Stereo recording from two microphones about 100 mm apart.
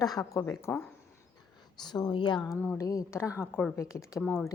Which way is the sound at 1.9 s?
50° left (ahead or behind).